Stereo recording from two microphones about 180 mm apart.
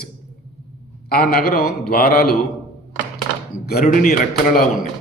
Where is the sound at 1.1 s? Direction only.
55° left (ahead or behind).